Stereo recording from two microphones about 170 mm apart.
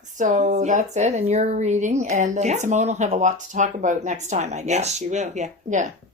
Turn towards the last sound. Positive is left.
turn(degrees=-45)  # may be behind; listen again after turning